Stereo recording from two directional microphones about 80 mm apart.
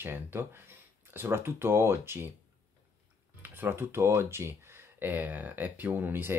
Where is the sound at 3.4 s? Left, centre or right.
Right.